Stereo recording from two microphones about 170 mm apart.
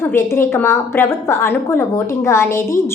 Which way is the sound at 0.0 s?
15° left (ahead or behind).